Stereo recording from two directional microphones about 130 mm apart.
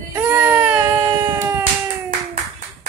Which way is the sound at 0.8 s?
25° right (ahead or behind).